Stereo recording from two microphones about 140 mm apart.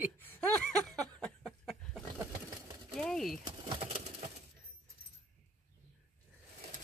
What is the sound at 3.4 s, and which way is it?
Bird, 35° right (ahead or behind).